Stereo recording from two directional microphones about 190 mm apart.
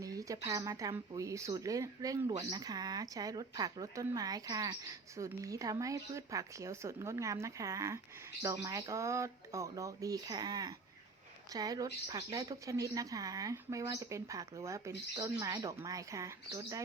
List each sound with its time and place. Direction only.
0.0 s a woman's voice: 20° right (ahead or behind)